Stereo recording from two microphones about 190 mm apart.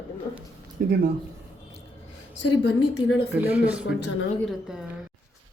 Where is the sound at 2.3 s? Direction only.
70° left (ahead or behind).